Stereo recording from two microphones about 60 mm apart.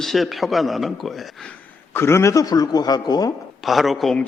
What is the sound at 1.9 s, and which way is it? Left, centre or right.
Speech, left.